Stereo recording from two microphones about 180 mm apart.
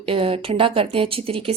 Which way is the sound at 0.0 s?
30° right (ahead or behind).